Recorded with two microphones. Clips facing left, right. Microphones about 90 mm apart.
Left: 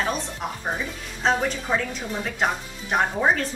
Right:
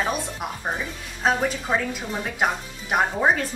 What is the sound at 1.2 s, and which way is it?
A woman's voice, 5° right (ahead or behind).